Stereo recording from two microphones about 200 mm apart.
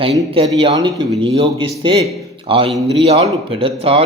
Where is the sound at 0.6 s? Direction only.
20° right (ahead or behind).